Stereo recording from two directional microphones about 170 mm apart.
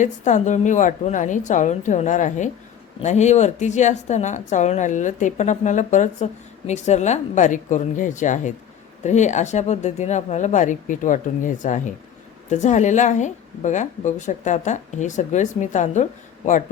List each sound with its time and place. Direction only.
0.0 s speech: 45° left (ahead or behind)